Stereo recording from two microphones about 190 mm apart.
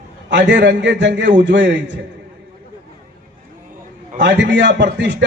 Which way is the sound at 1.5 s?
70° right (ahead or behind).